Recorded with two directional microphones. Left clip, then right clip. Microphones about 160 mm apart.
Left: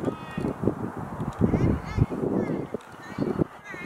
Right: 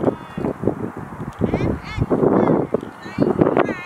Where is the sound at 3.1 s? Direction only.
30° right (ahead or behind).